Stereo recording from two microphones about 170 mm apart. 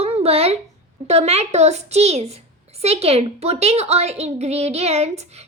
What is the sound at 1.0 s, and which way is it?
A child's voice, 40° right (ahead or behind).